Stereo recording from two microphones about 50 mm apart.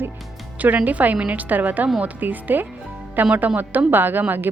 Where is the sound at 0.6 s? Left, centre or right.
Right.